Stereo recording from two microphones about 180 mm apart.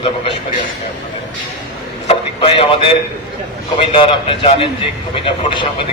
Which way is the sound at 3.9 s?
30° left (ahead or behind).